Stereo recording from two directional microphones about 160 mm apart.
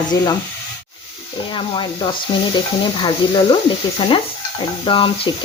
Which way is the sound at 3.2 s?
30° left (ahead or behind).